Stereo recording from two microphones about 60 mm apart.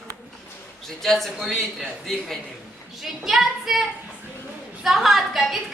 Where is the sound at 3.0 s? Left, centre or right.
Centre.